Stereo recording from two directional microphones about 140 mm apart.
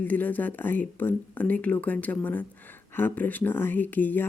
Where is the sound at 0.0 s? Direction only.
10° left (ahead or behind).